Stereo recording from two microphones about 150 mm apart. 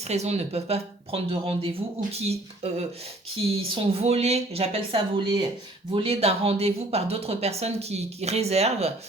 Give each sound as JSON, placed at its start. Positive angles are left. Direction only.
{"t": 0.1, "sound": "speech", "side_deg": -45}